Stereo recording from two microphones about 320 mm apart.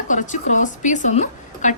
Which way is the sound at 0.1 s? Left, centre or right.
Left.